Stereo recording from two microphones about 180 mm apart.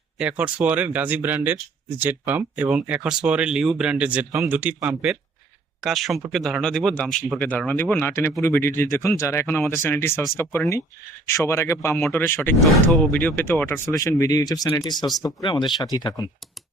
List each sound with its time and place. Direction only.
0.2 s speech: 5° right (ahead or behind); by 16.2 s 25° left (ahead or behind)